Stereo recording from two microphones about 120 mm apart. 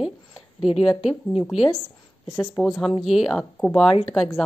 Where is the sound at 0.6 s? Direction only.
60° left (ahead or behind).